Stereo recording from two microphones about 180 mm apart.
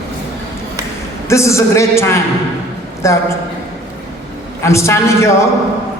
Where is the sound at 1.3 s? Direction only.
15° left (ahead or behind).